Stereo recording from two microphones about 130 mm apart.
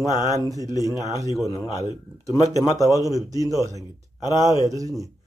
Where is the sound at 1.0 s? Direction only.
25° left (ahead or behind).